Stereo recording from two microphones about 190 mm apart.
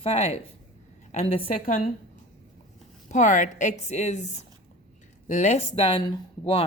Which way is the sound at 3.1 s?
40° left (ahead or behind).